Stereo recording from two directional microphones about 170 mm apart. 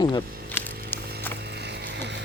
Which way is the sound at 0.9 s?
10° left (ahead or behind).